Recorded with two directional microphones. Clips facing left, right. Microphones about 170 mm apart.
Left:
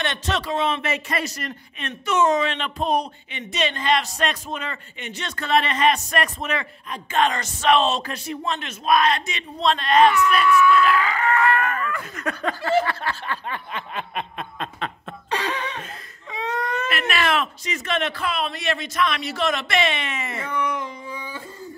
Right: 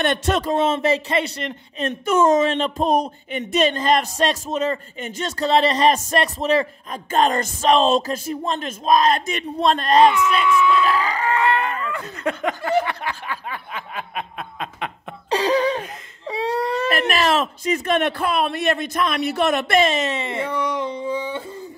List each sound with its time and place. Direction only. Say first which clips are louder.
0.0 s speech: right 6 dB; 50° right (ahead or behind); by 1.9 s 30° right (ahead or behind)
2.0 s speech: right 3 dB; 45° right (ahead or behind)
10.3 s speech: left 1 dB; 20° right (ahead or behind)
10.9 s speech: even; 35° right (ahead or behind); by 14.9 s 5° right (ahead or behind)
15.2 s a sound: right 9 dB; 30° right (ahead or behind)
16.3 s speech: right 5 dB; 35° right (ahead or behind)